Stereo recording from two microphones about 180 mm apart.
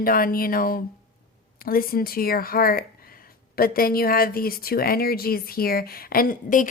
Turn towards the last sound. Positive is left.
turn(degrees=50)  # may be behind; listen again after turning